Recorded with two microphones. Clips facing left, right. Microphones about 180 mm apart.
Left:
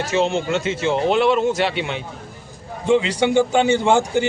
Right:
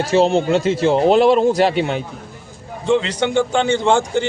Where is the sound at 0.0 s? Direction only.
35° right (ahead or behind).